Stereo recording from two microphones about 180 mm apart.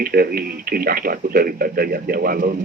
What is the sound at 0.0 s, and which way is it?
A man's voice, 55° right (ahead or behind).